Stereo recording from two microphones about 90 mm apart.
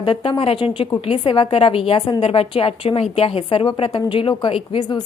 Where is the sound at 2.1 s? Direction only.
80° left.